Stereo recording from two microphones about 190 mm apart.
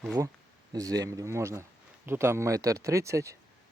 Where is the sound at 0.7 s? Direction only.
20° right (ahead or behind).